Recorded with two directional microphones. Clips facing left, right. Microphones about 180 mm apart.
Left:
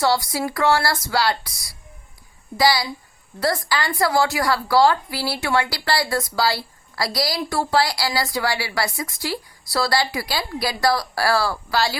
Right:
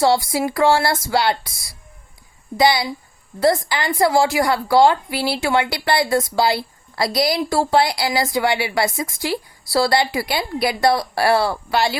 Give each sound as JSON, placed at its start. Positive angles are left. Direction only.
{"t": 0.0, "sound": "a woman's voice", "side_deg": -25}
{"t": 2.6, "sound": "a woman's voice", "side_deg": -20}